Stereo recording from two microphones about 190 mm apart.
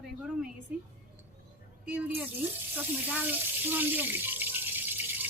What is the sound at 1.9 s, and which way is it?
Speech, 5° right (ahead or behind).